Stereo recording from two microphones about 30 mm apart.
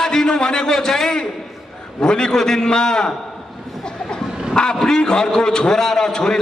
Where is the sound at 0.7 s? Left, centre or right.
Centre.